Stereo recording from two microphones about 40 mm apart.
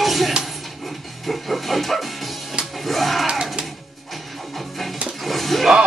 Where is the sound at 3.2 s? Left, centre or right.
Centre.